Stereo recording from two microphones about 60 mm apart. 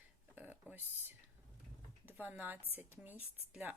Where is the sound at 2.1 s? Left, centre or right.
Right.